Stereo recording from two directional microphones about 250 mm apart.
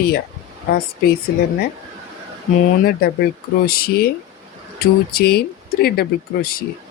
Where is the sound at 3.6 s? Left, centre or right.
Left.